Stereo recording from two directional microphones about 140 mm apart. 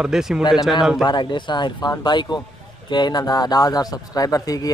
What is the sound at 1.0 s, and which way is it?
Speech, 35° left (ahead or behind).